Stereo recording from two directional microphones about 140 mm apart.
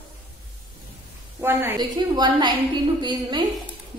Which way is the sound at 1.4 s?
15° right (ahead or behind).